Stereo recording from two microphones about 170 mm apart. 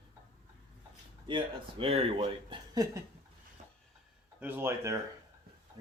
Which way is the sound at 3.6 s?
45° right (ahead or behind).